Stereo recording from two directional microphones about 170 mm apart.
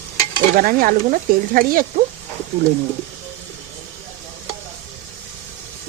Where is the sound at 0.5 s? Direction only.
60° right (ahead or behind).